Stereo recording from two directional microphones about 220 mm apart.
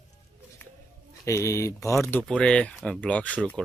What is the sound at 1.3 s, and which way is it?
Speech, 15° left (ahead or behind).